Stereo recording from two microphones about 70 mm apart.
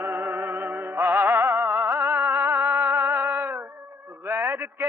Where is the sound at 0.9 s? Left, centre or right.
Right.